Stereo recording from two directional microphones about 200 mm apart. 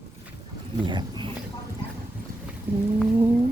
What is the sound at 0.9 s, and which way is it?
Speech, 20° right (ahead or behind).